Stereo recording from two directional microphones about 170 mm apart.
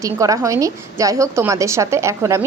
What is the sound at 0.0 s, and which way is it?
Speech, 20° right (ahead or behind).